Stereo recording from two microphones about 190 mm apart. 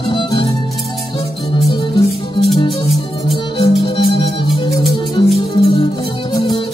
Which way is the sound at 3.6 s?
25° left (ahead or behind).